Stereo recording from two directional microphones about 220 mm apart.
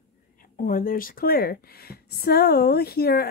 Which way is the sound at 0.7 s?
40° left (ahead or behind).